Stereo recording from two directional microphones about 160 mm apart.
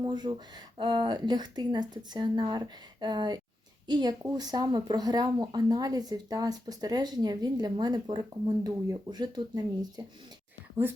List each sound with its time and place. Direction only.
0.0 s speech: 30° right (ahead or behind)